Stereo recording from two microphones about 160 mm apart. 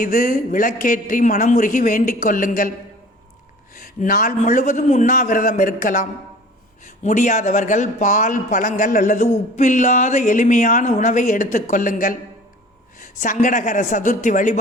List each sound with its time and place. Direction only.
0.0 s a man's voice: 60° left (ahead or behind)
3.8 s a man's voice: 60° left (ahead or behind)
6.8 s a man's voice: 50° left (ahead or behind)